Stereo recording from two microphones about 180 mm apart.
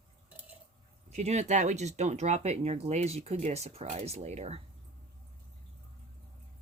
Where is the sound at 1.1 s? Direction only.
40° right (ahead or behind).